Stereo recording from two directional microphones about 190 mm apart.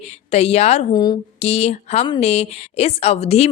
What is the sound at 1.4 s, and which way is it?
A woman's voice, 35° left (ahead or behind).